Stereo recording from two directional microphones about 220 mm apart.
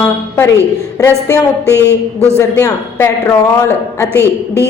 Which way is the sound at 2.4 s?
15° left (ahead or behind).